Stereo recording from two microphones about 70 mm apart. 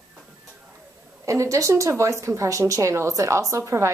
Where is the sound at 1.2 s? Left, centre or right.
Right.